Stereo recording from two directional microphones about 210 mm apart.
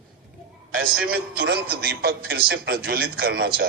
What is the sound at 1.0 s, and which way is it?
A man's voice, 50° right (ahead or behind).